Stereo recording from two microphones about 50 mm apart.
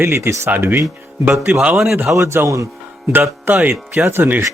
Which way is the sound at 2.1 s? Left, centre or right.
Right.